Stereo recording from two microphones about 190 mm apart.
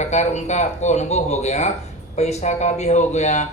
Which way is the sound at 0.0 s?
35° left (ahead or behind).